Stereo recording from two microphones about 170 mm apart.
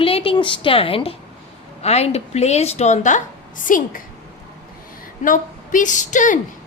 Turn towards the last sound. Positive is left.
turn(degrees=50)  # may be behind; listen again after turning